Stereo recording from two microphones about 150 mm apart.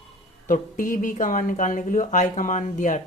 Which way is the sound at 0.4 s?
60° left (ahead or behind).